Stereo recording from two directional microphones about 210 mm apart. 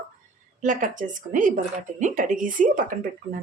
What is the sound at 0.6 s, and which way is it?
Speech, 40° right (ahead or behind).